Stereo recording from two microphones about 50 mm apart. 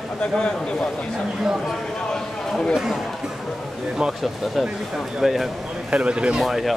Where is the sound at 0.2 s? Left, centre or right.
Centre.